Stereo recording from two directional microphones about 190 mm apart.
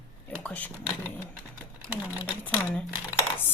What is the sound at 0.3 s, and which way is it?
Speech, 10° left (ahead or behind).